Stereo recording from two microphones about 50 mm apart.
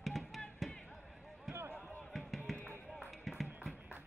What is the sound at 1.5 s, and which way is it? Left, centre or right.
Basketball bounce, right.